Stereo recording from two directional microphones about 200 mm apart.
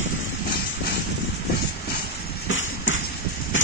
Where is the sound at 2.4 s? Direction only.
70° left (ahead or behind).